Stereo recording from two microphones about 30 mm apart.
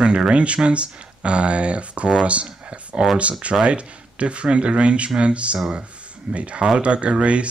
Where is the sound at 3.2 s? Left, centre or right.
Right.